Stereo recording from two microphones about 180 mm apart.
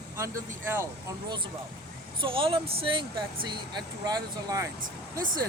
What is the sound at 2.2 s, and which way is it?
Speech, 30° right (ahead or behind).